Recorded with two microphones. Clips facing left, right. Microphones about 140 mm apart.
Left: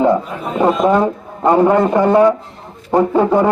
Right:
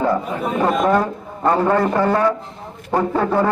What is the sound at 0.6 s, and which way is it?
A man's voice, 20° left (ahead or behind).